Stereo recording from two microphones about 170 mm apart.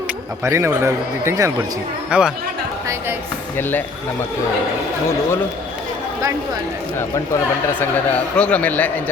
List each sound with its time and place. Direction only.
0.4 s a man's voice: 15° right (ahead or behind)
2.0 s speech: 5° right (ahead or behind)
3.6 s a man's voice: 10° left (ahead or behind)
8.4 s a man's voice: 10° left (ahead or behind)